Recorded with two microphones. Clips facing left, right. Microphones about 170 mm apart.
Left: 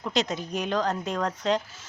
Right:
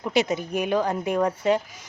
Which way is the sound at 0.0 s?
10° right (ahead or behind).